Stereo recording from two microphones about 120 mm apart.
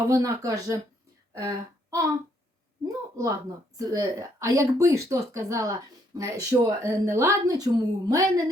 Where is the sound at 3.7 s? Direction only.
30° right (ahead or behind).